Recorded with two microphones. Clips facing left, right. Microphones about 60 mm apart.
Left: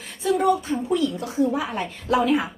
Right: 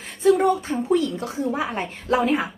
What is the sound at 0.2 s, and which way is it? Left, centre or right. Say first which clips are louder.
A woman's voice: right 3 dB; right.